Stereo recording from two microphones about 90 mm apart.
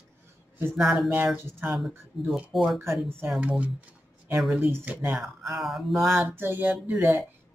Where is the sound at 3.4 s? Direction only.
15° right (ahead or behind).